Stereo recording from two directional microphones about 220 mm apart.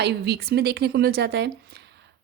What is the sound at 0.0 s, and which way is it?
Speech, 50° right (ahead or behind).